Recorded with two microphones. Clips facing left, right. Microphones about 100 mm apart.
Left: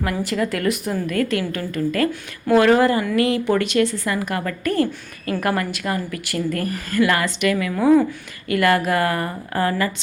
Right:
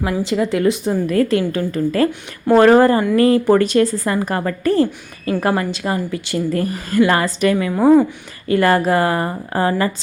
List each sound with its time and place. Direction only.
0.0 s a woman's voice: 20° right (ahead or behind)